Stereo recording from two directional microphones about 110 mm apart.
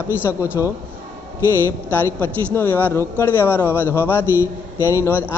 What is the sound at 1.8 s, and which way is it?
A man's voice, 20° left (ahead or behind).